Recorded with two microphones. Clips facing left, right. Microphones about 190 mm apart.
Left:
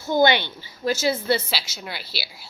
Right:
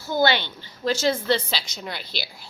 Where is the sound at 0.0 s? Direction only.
20° left (ahead or behind).